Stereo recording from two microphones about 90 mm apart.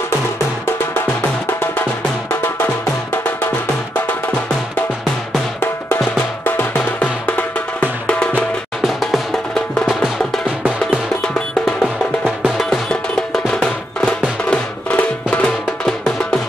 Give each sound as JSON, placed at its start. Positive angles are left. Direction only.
{"t": 6.4, "sound": "music", "side_deg": 20}
{"t": 8.8, "sound": "music", "side_deg": 0}